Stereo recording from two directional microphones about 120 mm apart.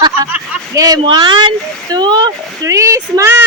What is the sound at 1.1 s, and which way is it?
A woman's voice, 40° right (ahead or behind).